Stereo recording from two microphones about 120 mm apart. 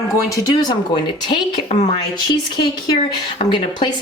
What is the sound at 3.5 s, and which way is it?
Speech, 40° left (ahead or behind).